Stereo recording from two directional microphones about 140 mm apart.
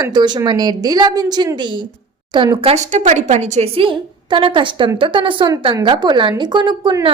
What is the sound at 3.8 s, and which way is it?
A woman's voice, 35° right (ahead or behind).